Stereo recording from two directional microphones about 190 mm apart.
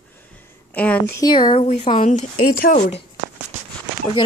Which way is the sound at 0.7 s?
5° left (ahead or behind).